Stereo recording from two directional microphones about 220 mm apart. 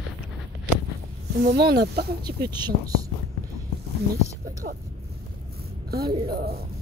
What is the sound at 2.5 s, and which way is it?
Speech, 20° right (ahead or behind).